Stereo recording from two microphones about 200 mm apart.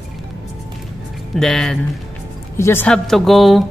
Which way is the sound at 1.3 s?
Centre (ahead or behind).